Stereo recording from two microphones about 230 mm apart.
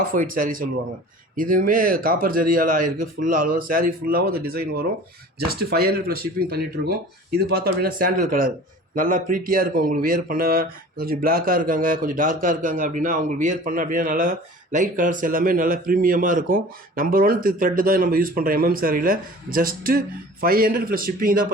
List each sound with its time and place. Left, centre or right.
0.0 s speech: right